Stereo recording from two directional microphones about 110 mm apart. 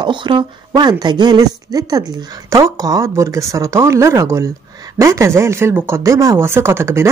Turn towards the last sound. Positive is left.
turn(degrees=-25)  # may be behind; listen again after turning